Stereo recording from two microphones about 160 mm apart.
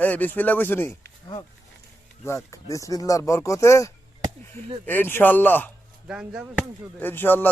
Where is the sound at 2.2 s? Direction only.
20° left (ahead or behind).